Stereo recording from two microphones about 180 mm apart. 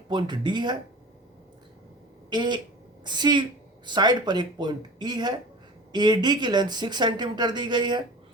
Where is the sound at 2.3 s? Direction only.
25° right (ahead or behind).